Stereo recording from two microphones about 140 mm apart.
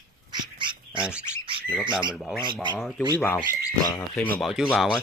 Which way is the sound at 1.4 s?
35° right (ahead or behind).